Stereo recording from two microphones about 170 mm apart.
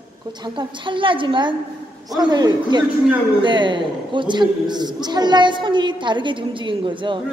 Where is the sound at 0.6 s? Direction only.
30° right (ahead or behind).